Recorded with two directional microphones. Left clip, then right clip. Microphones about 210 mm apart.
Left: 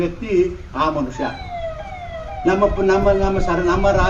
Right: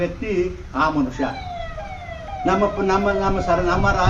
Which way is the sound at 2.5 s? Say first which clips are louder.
Left 3 dB; 30° left (ahead or behind).